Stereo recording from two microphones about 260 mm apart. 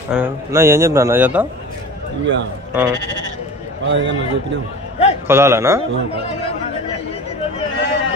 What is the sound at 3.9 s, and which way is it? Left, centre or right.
Speech, right.